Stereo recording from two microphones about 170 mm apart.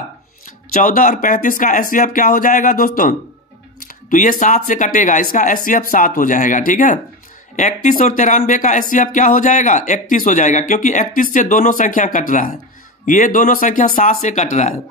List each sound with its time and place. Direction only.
0.7 s speech: 50° left (ahead or behind)